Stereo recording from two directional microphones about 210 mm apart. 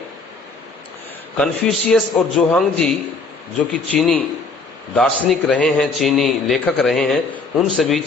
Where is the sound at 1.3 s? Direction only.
Centre (ahead or behind).